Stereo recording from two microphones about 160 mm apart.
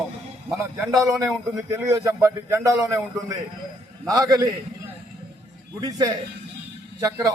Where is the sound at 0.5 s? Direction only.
15° right (ahead or behind).